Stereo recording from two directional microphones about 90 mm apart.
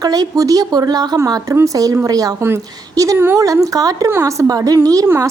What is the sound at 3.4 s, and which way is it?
A woman's voice, 40° right (ahead or behind).